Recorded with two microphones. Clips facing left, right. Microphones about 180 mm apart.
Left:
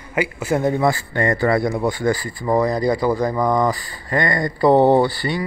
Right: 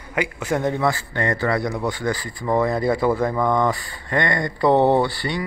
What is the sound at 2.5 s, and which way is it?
A man's voice, centre (ahead or behind).